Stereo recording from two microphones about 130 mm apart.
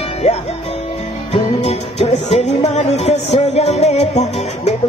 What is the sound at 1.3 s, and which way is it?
Music, 50° left (ahead or behind).